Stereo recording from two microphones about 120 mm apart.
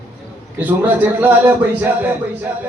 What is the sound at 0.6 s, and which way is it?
Speech, 15° right (ahead or behind).